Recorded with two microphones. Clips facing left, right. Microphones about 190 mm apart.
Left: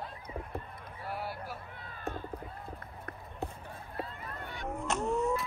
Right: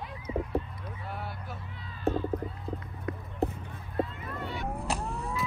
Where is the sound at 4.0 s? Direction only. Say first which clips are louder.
Right 9 dB; 35° left (ahead or behind).